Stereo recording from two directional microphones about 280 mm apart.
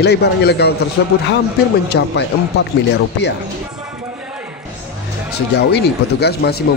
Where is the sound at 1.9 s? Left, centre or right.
Left.